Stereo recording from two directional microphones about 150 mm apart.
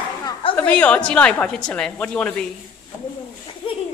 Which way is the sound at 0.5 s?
10° left (ahead or behind).